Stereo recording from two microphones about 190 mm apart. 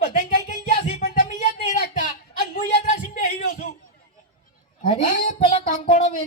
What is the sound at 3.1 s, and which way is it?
Speech, 45° left (ahead or behind).